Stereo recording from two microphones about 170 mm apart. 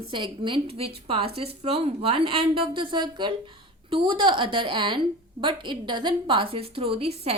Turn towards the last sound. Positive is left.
turn(degrees=-35)  # may be behind; listen again after turning